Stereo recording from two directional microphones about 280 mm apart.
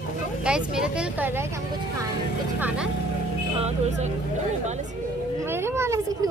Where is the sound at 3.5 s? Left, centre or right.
Right.